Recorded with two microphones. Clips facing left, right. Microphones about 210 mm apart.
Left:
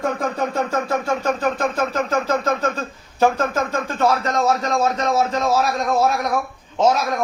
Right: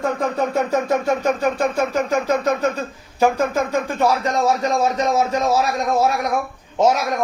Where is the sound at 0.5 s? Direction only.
15° right (ahead or behind).